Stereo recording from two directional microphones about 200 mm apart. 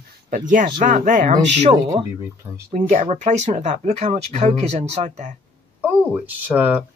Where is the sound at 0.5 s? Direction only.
40° right (ahead or behind).